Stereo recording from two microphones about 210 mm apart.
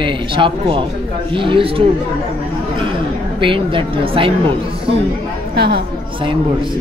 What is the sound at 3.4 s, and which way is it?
Speech, 25° right (ahead or behind).